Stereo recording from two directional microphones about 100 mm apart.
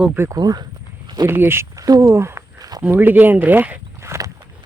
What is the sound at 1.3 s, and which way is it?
Speech, 25° right (ahead or behind).